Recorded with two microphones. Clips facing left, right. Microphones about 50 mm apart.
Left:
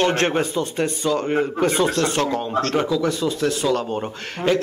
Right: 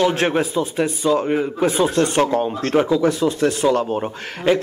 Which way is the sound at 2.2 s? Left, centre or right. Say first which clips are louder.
Right 4 dB; right.